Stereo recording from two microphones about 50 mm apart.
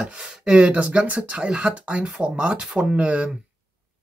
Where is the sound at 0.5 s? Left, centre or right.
Right.